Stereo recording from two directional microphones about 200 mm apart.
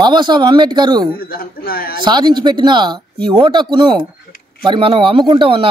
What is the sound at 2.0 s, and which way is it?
Speech, 20° right (ahead or behind).